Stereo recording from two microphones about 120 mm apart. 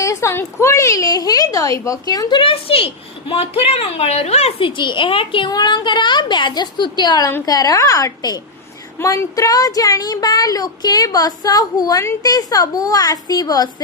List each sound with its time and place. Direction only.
0.0 s speech: 25° left (ahead or behind); by 4.7 s 60° left (ahead or behind)
4.8 s speech: 40° left (ahead or behind)